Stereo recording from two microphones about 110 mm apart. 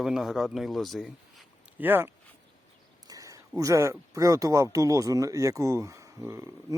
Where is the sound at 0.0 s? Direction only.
5° right (ahead or behind).